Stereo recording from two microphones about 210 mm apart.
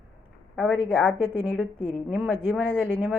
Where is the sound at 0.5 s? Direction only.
5° right (ahead or behind).